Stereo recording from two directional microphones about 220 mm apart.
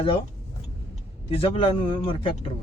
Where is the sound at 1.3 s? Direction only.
25° left (ahead or behind).